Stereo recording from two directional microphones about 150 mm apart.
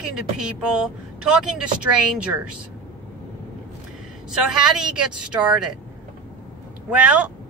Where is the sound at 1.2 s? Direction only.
5° right (ahead or behind).